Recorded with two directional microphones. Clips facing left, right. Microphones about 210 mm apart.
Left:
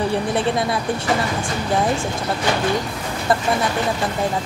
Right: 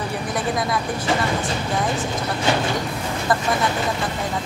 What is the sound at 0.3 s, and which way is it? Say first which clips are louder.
Speech: left 3 dB; 30° left (ahead or behind).